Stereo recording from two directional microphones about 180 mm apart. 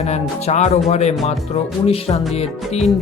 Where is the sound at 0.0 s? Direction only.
40° left (ahead or behind).